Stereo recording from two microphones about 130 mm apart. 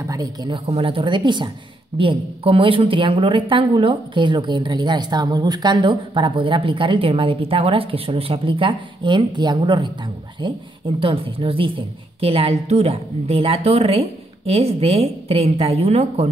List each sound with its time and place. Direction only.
0.0 s speech: 25° right (ahead or behind)
0.7 s a woman's voice: 45° right (ahead or behind)